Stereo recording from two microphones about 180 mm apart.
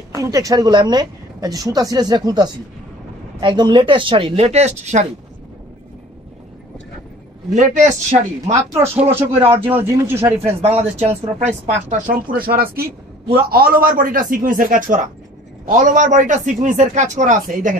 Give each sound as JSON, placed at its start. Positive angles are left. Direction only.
{"t": 0.1, "sound": "speech", "side_deg": -20}
{"t": 7.5, "sound": "speech", "side_deg": -40}
{"t": 9.7, "sound": "speech", "side_deg": -10}
{"t": 10.6, "sound": "speech", "side_deg": -35}